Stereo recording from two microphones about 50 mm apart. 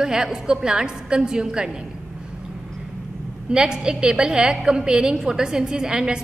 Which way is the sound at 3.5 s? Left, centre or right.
Centre.